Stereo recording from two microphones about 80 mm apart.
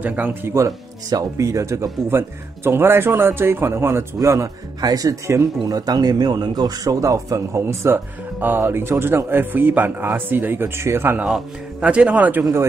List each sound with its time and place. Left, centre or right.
0.0 s speech: centre
0.6 s speech: right
4.2 s speech: right
7.6 s speech: right
11.8 s a man's voice: centre